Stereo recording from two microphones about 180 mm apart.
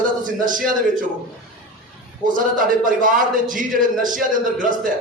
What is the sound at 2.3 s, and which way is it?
A man's voice, 50° right (ahead or behind).